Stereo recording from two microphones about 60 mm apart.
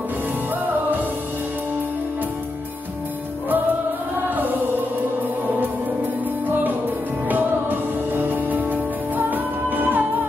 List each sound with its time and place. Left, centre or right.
6.4 s music: right